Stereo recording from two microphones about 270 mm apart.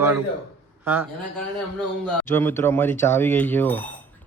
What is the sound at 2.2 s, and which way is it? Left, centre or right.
Speech, centre.